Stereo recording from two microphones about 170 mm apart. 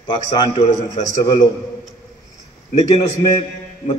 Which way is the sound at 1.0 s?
20° left (ahead or behind).